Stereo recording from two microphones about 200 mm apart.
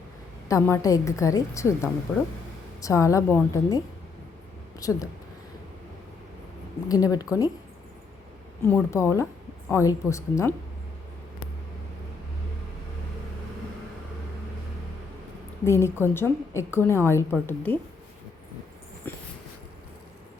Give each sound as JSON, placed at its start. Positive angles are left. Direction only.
{"t": 0.4, "sound": "a woman's voice", "side_deg": 15}
{"t": 4.8, "sound": "a woman's voice", "side_deg": 15}
{"t": 6.8, "sound": "a woman's voice", "side_deg": 20}
{"t": 8.6, "sound": "a woman's voice", "side_deg": 10}
{"t": 15.6, "sound": "a woman's voice", "side_deg": 15}
{"t": 19.1, "sound": "dog", "side_deg": 10}